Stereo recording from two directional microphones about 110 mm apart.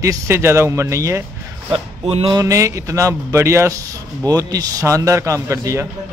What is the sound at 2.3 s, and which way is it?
A man's voice, 30° right (ahead or behind).